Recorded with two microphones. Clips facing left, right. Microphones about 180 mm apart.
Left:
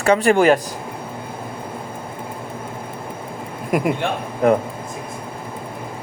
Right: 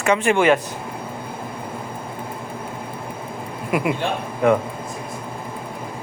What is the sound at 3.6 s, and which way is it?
Speech, 40° left (ahead or behind).